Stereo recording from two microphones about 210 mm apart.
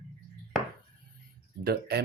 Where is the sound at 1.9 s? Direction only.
50° right (ahead or behind).